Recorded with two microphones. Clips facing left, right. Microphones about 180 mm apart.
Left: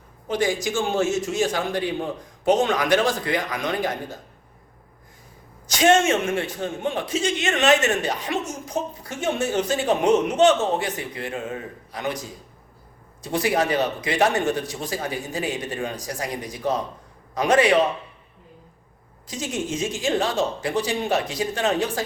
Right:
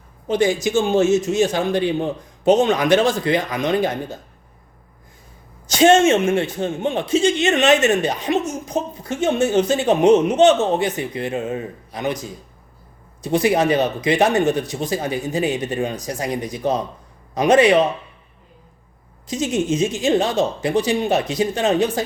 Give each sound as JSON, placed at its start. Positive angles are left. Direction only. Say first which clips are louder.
{"t": 0.3, "sound": "a man's voice", "louder": "right 5 dB", "side_deg": -25}
{"t": 5.6, "sound": "a man's voice", "louder": "right 5 dB", "side_deg": -30}
{"t": 13.2, "sound": "a man's voice", "louder": "right 5 dB", "side_deg": -20}
{"t": 19.3, "sound": "a man's voice", "louder": "right 7 dB", "side_deg": -20}